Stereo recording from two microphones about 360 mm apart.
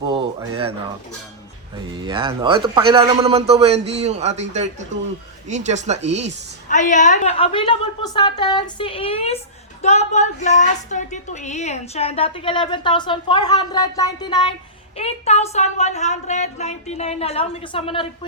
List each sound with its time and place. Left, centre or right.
0.0 s a sound: centre
2.0 s a man's voice: centre
6.7 s a woman's voice: left